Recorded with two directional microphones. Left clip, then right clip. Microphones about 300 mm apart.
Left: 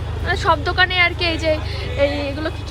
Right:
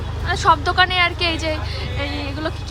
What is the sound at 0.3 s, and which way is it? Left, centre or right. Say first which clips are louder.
A woman's voice: right 2 dB; centre.